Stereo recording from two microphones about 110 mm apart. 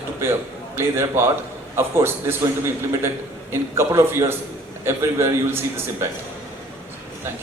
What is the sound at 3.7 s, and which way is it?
A man's voice, 25° right (ahead or behind).